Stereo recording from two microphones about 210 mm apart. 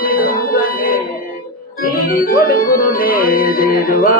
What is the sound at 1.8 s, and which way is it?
Music, 45° left (ahead or behind).